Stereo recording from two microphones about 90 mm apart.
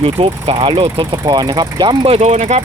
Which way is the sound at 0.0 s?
90° right.